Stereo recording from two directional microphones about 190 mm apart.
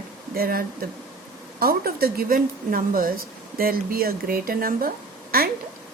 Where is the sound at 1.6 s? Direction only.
50° right (ahead or behind).